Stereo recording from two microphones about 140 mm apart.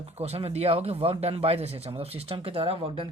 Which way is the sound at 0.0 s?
45° right (ahead or behind).